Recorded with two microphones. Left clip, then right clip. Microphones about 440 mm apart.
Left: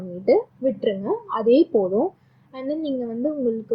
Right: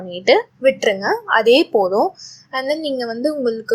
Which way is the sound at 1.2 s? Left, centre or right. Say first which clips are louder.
Right 5 dB; right.